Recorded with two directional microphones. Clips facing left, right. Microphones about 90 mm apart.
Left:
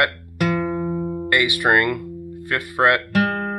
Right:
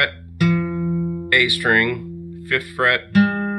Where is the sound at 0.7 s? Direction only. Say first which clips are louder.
Right 1 dB; 65° left (ahead or behind).